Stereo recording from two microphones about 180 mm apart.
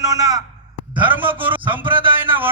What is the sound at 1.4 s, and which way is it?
Speech, 25° right (ahead or behind).